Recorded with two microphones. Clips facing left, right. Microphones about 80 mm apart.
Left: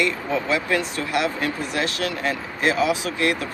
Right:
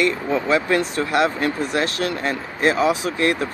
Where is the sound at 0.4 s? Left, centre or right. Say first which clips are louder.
Right 5 dB; right.